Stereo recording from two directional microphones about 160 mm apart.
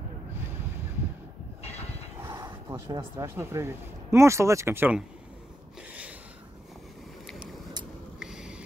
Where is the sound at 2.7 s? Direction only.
15° right (ahead or behind).